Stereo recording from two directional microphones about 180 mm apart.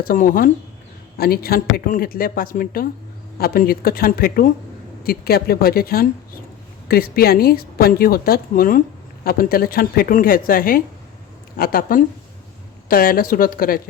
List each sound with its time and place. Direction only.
0.0 s a woman's voice: 50° left (ahead or behind)